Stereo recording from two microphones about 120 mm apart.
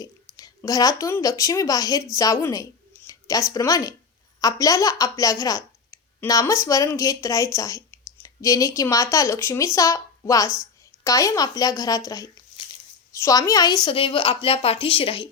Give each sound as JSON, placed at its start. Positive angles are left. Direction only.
{"t": 0.0, "sound": "a woman's voice", "side_deg": 30}
{"t": 13.9, "sound": "speech", "side_deg": 50}